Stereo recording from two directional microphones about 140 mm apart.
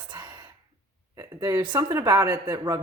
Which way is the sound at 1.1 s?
20° right (ahead or behind).